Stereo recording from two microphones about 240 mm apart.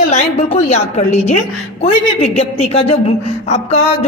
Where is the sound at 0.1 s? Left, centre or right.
Left.